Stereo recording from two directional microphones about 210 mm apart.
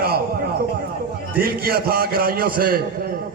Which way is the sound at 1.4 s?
45° right (ahead or behind).